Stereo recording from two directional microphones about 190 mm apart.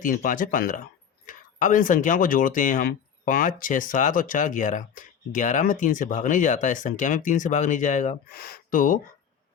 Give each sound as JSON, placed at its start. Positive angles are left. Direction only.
{"t": 0.0, "sound": "speech", "side_deg": 45}